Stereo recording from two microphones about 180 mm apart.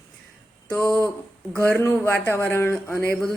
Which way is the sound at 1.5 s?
15° left (ahead or behind).